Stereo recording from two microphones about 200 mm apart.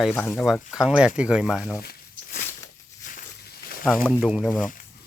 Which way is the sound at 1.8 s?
45° left (ahead or behind).